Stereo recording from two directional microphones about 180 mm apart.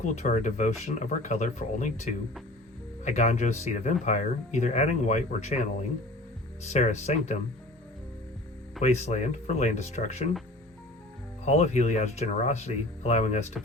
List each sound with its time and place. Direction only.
0.0 s speech: 45° left (ahead or behind)
6.7 s speech: 40° left (ahead or behind)
8.8 s speech: 40° left (ahead or behind)
11.4 s speech: 40° left (ahead or behind)